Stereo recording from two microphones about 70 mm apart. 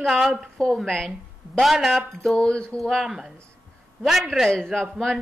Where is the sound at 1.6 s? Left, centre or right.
Centre.